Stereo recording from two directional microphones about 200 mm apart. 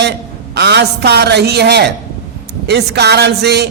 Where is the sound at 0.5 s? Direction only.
55° right (ahead or behind).